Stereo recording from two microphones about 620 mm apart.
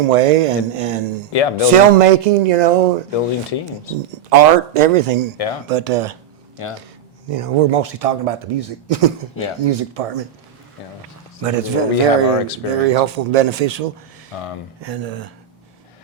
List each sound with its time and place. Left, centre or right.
0.0 s speech: right
1.3 s speech: left
2.0 s speech: right
3.1 s speech: left
4.3 s speech: right
5.6 s speech: right
7.3 s a man's voice: right
11.4 s speech: right
14.3 s speech: left
14.8 s speech: right